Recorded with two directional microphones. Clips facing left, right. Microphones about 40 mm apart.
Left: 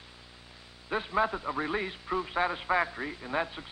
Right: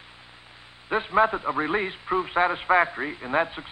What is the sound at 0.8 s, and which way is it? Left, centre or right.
A man's voice, right.